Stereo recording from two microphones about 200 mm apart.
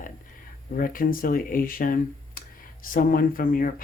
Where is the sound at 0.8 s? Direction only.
45° left (ahead or behind).